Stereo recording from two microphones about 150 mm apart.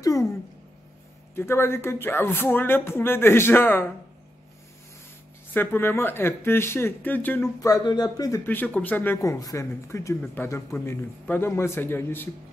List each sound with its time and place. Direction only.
0.0 s a sound: 20° left (ahead or behind)
1.3 s speech: 15° left (ahead or behind)
5.5 s speech: 15° left (ahead or behind)
8.5 s speech: 10° left (ahead or behind)